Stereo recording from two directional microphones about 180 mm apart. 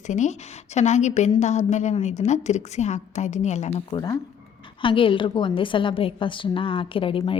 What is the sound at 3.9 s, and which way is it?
A woman's voice, 20° left (ahead or behind).